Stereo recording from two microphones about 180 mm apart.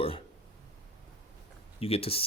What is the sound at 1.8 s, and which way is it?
Speech, 35° left (ahead or behind).